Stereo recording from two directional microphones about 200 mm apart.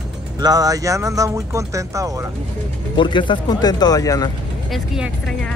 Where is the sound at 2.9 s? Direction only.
25° left (ahead or behind).